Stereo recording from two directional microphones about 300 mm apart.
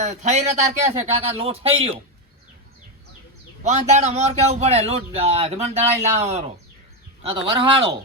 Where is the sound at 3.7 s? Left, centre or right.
Right.